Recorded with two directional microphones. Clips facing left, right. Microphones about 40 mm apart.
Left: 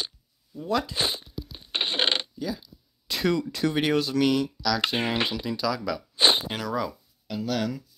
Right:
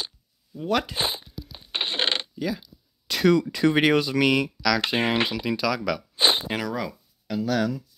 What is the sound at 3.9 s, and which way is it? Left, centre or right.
Speech, right.